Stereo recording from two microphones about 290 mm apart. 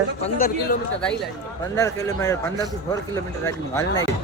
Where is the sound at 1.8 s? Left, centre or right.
Centre.